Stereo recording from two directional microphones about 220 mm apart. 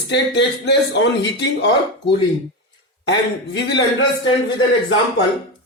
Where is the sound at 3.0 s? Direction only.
50° left (ahead or behind).